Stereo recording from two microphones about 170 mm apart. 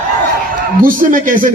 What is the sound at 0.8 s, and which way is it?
Speech, 55° right (ahead or behind).